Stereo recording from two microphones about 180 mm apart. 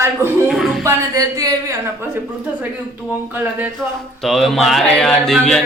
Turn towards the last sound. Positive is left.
turn(degrees=0)  # may be behind; listen again after turning